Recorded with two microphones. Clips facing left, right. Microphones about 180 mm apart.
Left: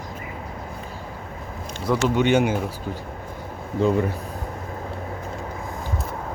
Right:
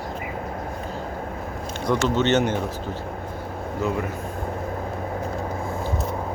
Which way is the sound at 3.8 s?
30° left (ahead or behind).